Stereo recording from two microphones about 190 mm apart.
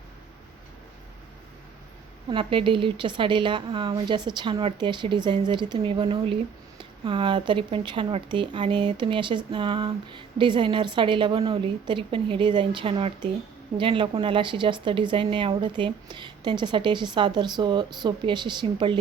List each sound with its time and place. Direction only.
2.3 s speech: 25° right (ahead or behind)